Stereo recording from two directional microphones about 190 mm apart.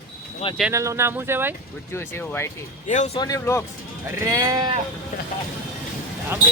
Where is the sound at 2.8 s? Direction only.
40° left (ahead or behind).